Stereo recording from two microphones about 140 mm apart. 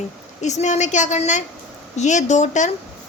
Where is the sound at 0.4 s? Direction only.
55° left (ahead or behind).